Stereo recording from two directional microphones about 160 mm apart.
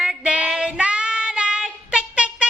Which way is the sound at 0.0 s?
5° right (ahead or behind).